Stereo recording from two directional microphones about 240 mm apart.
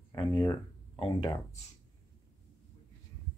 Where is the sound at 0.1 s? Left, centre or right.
Centre.